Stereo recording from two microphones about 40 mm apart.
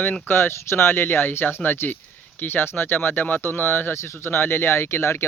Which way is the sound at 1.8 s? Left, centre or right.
Left.